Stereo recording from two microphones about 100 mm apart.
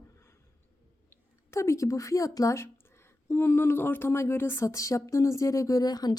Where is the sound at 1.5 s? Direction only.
30° left (ahead or behind).